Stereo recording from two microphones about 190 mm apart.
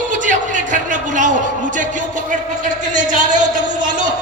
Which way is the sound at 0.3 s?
40° right (ahead or behind).